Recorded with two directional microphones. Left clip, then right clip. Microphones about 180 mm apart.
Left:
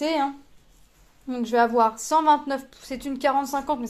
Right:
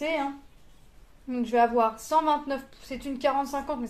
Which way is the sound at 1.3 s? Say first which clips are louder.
Left 2 dB; 40° left (ahead or behind).